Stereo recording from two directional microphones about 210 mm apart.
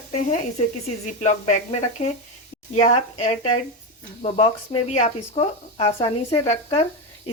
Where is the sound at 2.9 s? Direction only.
35° left (ahead or behind).